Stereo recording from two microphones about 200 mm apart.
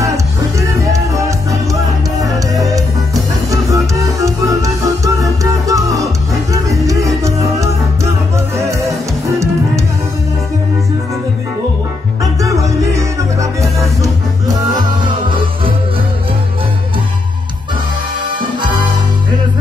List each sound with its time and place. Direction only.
0.6 s music: 15° right (ahead or behind)
3.4 s music: 15° right (ahead or behind)
7.2 s music: 15° right (ahead or behind)
12.2 s music: 15° right (ahead or behind)
18.6 s music: 20° right (ahead or behind)